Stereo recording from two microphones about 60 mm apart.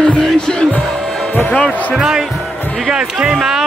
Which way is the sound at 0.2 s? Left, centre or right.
Centre.